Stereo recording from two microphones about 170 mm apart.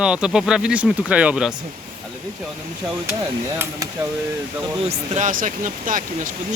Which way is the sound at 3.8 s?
20° right (ahead or behind).